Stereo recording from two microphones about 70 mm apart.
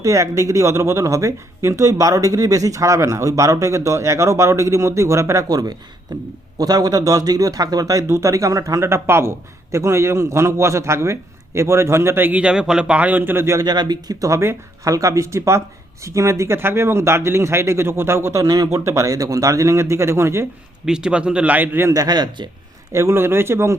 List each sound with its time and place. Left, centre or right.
0.0 s speech: right
5.5 s a man's voice: right
6.1 s speech: right
6.6 s a man's voice: right
8.0 s a man's voice: right
12.4 s a man's voice: centre; by 13.6 s right
13.6 s speech: right
14.2 s a man's voice: right
18.4 s a man's voice: right
18.7 s speech: right
20.8 s a man's voice: centre; by 21.8 s right
21.9 s speech: right
22.9 s a man's voice: right